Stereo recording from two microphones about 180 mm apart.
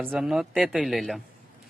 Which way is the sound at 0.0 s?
Centre (ahead or behind).